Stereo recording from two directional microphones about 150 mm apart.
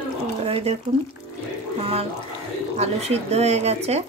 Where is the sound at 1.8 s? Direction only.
40° right (ahead or behind).